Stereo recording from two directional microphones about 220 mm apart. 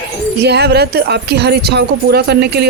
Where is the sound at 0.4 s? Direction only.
50° right (ahead or behind).